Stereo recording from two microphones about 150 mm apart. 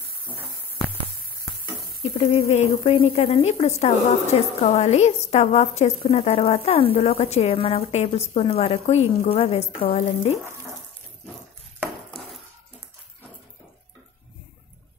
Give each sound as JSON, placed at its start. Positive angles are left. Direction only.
{"t": 2.1, "sound": "speech", "side_deg": 45}